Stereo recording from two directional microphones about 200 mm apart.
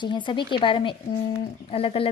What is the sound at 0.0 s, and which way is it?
Speech, 25° left (ahead or behind).